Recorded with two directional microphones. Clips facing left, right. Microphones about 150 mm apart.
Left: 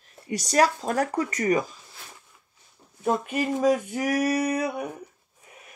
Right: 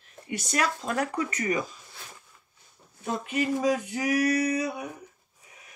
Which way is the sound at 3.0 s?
55° left (ahead or behind).